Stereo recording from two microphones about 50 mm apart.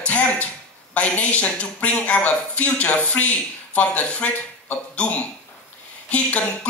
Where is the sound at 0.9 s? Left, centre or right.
Left.